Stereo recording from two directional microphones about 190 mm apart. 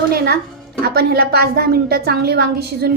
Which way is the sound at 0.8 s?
55° right (ahead or behind).